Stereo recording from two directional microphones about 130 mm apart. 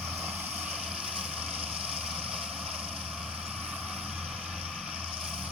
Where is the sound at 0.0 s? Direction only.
15° right (ahead or behind).